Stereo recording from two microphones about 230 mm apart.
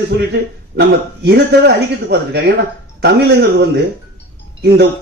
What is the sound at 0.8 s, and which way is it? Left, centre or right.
A man's voice, right.